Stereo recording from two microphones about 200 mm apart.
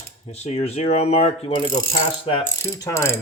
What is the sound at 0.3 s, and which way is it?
Speech, 35° left (ahead or behind).